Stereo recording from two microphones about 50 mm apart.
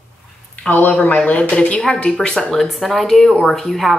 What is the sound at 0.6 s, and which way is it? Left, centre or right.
Speech, left.